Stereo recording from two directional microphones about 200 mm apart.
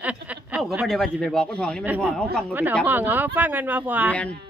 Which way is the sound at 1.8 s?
10° right (ahead or behind).